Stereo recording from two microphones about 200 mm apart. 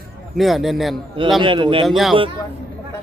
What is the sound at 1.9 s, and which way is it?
Speech, centre (ahead or behind).